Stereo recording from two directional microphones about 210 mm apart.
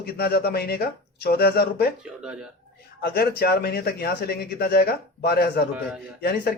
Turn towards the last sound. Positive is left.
turn(degrees=50)  # may be behind; listen again after turning